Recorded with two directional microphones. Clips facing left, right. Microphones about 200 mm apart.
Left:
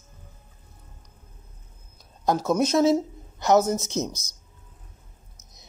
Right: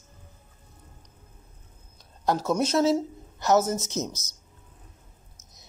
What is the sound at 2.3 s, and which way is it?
A woman's voice, 10° left (ahead or behind).